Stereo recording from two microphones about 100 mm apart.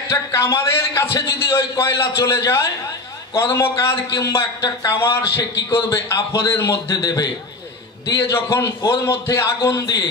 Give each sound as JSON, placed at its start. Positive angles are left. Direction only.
{"t": 0.3, "sound": "a man's voice", "side_deg": 30}
{"t": 4.9, "sound": "a man's voice", "side_deg": 25}